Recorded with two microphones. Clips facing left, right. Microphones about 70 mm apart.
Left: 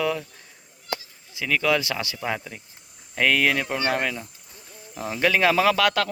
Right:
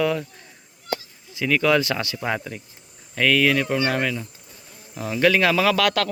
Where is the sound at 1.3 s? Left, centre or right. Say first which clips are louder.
Right 3 dB; centre.